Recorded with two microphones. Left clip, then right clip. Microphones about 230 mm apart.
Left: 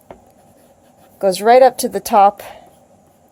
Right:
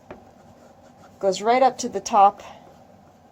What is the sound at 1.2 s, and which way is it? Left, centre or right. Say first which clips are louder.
Speech: left 9 dB; left.